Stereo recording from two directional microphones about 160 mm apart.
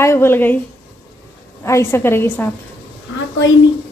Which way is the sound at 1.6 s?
15° left (ahead or behind).